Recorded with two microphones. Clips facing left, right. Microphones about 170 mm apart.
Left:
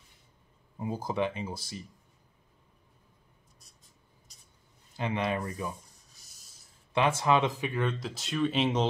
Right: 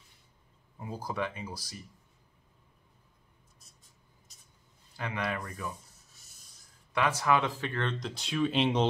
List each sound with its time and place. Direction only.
0.7 s speech: 20° left (ahead or behind)
4.9 s speech: 20° left (ahead or behind)
6.9 s speech: 25° left (ahead or behind); by 8.8 s centre (ahead or behind)